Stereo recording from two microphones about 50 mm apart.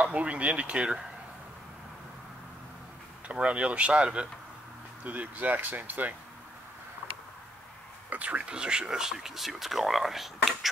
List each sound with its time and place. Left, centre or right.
0.0 s speech: right
3.3 s speech: right
5.0 s speech: right
8.1 s speech: right; by 10.7 s centre